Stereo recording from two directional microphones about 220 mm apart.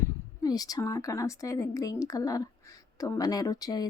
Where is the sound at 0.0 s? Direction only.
15° left (ahead or behind).